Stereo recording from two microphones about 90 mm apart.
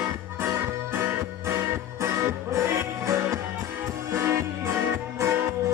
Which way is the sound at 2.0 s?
30° right (ahead or behind).